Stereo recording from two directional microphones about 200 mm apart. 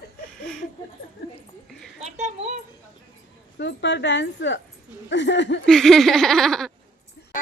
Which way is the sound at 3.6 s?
60° left (ahead or behind).